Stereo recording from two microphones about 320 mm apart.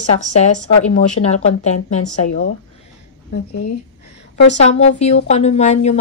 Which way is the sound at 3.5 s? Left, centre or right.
Left.